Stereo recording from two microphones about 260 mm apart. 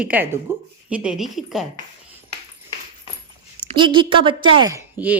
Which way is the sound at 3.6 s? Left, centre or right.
Centre.